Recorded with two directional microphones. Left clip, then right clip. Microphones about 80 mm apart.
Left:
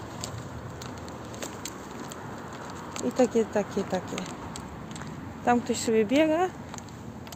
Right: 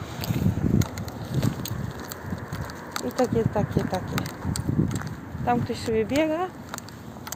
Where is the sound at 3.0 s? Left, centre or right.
Left.